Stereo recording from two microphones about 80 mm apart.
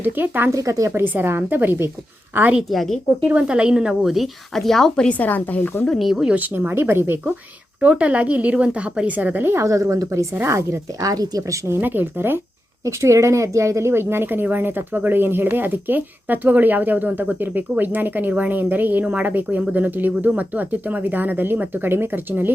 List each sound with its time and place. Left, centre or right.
0.0 s a woman's voice: right
0.5 s a woman's voice: right
2.6 s a woman's voice: centre
3.2 s a woman's voice: centre; by 5.8 s left
6.0 s a woman's voice: centre
6.3 s a woman's voice: right
7.8 s a woman's voice: centre
9.6 s speech: right
11.8 s a woman's voice: right
12.8 s a woman's voice: right